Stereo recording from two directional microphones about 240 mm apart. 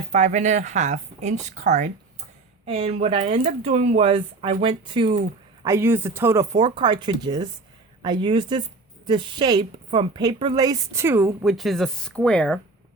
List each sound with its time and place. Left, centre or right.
0.1 s speech: right
5.6 s a woman's voice: centre